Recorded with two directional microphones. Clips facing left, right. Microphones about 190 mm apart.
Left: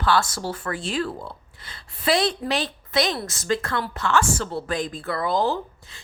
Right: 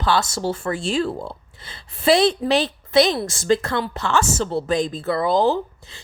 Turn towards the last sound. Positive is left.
turn(degrees=-25)  # may be behind; listen again after turning